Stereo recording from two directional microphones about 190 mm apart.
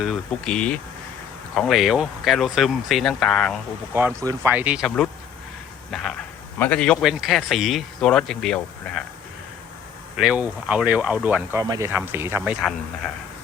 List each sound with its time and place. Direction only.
0.0 s speech: centre (ahead or behind)
3.9 s speech: 15° right (ahead or behind); by 9.0 s centre (ahead or behind)
10.2 s speech: 5° right (ahead or behind)
11.6 s speech: 20° right (ahead or behind)
11.9 s speech: 10° right (ahead or behind)